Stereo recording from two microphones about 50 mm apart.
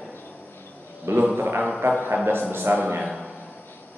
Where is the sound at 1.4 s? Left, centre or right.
Right.